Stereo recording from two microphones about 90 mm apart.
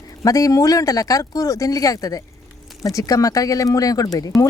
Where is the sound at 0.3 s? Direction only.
40° left (ahead or behind).